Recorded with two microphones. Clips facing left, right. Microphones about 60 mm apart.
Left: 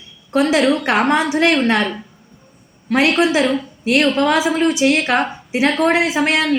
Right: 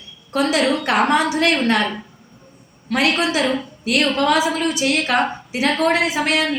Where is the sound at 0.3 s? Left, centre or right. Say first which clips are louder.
Left 3 dB; left.